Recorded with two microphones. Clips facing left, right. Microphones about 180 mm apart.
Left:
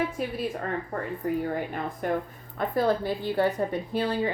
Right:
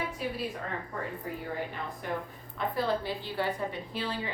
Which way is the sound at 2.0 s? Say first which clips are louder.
Left 8 dB; 50° left (ahead or behind).